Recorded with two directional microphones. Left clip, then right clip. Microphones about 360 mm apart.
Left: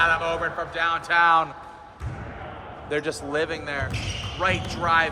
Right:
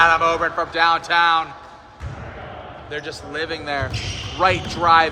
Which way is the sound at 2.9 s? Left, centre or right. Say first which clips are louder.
Left 3 dB; centre.